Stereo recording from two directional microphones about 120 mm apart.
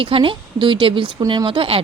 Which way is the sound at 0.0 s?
45° right (ahead or behind).